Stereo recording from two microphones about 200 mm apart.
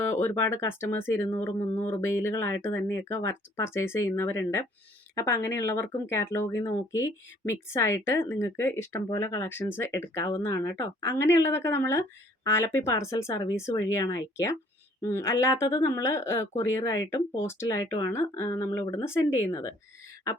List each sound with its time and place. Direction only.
0.1 s speech: 10° left (ahead or behind)